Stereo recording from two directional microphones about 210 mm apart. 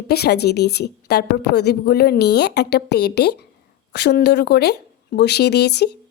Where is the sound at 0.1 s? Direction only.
50° left (ahead or behind).